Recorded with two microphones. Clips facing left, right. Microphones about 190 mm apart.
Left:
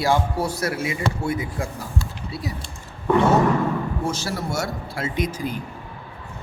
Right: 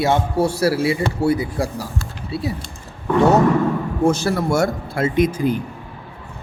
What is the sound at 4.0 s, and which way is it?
Speech, 55° right (ahead or behind).